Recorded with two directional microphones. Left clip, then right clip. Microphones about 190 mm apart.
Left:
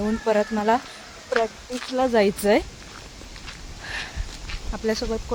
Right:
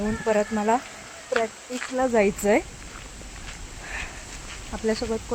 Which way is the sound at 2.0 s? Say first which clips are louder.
Left 2 dB; 15° left (ahead or behind).